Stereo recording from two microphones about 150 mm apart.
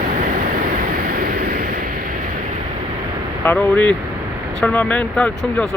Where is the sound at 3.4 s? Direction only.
10° left (ahead or behind).